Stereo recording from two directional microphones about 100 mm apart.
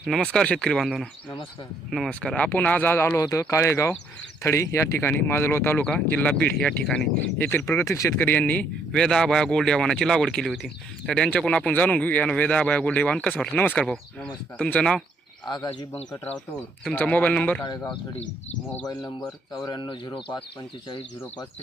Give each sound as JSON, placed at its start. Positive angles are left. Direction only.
{"t": 0.0, "sound": "speech", "side_deg": 5}
{"t": 3.2, "sound": "speech", "side_deg": 30}
{"t": 5.8, "sound": "speech", "side_deg": 10}
{"t": 7.3, "sound": "speech", "side_deg": 20}
{"t": 8.2, "sound": "speech", "side_deg": 20}
{"t": 8.9, "sound": "speech", "side_deg": 5}
{"t": 15.4, "sound": "speech", "side_deg": 45}
{"t": 16.9, "sound": "speech", "side_deg": 15}
{"t": 18.9, "sound": "speech", "side_deg": 35}